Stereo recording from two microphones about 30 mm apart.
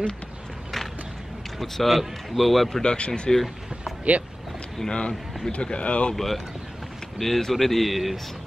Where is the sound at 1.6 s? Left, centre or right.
Centre.